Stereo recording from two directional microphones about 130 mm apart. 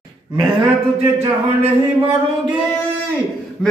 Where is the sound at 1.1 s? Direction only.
50° right (ahead or behind).